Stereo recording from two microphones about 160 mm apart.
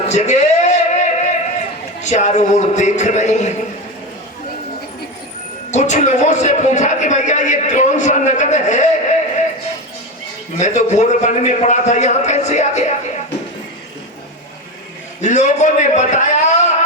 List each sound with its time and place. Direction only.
0.0 s a sound: 45° left (ahead or behind)
2.0 s a man's voice: 50° left (ahead or behind)
5.7 s a man's voice: 50° left (ahead or behind)
10.6 s a man's voice: 45° left (ahead or behind)
15.2 s a man's voice: 50° left (ahead or behind)